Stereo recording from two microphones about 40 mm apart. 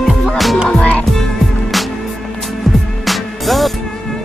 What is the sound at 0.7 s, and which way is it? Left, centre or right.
Music, left.